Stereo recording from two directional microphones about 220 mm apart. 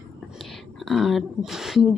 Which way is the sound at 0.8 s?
Centre (ahead or behind).